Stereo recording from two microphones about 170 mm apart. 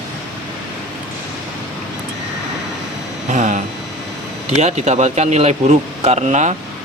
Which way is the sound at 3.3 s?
45° right (ahead or behind).